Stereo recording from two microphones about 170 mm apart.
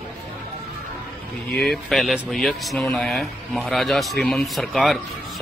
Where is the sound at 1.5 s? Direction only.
Centre (ahead or behind).